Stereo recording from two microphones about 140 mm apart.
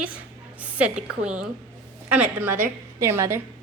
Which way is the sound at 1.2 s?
5° right (ahead or behind).